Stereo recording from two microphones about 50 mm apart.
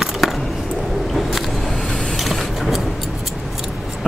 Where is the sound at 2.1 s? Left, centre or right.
Centre.